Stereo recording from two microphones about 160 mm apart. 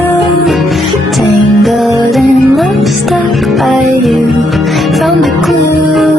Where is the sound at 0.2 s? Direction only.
Centre (ahead or behind).